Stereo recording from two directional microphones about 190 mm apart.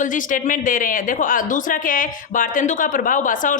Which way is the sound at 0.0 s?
45° left (ahead or behind).